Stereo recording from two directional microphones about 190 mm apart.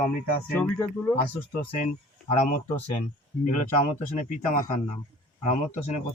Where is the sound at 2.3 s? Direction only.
40° left (ahead or behind).